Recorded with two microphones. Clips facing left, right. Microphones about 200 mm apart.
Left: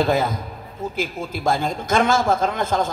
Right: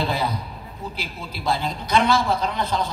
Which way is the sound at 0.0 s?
45° left (ahead or behind).